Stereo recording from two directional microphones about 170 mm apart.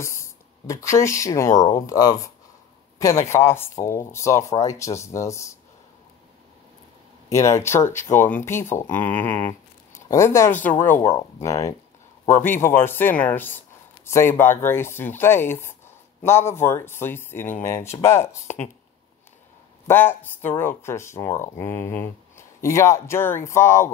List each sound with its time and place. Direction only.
0.0 s speech: 15° left (ahead or behind)
7.2 s speech: 15° left (ahead or behind)
19.9 s speech: 10° left (ahead or behind)